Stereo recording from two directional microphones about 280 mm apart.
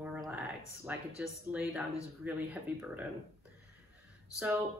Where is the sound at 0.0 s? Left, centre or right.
Centre.